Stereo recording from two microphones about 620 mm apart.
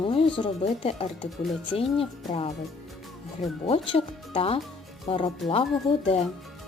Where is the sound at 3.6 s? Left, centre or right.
Centre.